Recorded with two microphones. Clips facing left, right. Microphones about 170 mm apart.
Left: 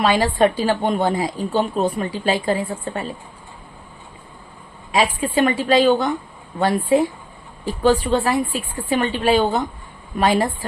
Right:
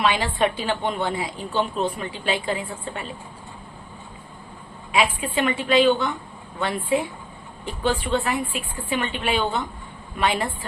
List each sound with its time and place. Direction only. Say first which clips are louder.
0.0 s a woman's voice: left 5 dB; 40° left (ahead or behind)
4.9 s a woman's voice: left 3 dB; 40° left (ahead or behind)